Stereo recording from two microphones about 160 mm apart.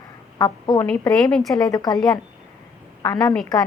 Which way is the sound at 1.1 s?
5° left (ahead or behind).